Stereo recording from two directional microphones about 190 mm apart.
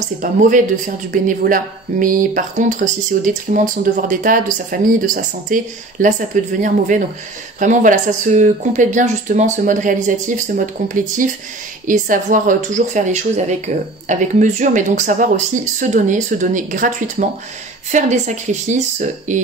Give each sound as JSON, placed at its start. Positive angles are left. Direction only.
{"t": 0.2, "sound": "speech", "side_deg": -40}
{"t": 17.9, "sound": "speech", "side_deg": -40}